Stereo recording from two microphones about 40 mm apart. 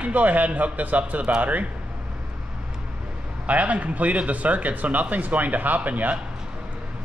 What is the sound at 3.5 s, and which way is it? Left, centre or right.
Speech, right.